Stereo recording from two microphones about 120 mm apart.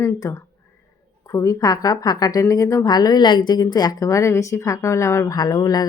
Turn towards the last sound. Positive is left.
turn(degrees=35)  # may be behind; listen again after turning